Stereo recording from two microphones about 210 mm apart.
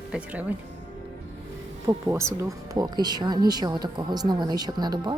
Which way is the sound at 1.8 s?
15° right (ahead or behind).